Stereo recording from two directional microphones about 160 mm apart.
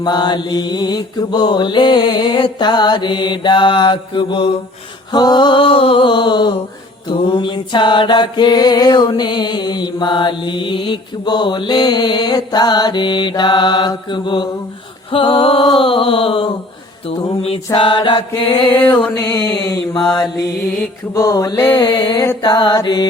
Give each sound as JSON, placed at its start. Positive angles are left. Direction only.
{"t": 0.0, "sound": "mantra", "side_deg": 25}
{"t": 15.1, "sound": "music", "side_deg": 30}
{"t": 17.7, "sound": "music", "side_deg": 30}
{"t": 19.5, "sound": "mantra", "side_deg": 25}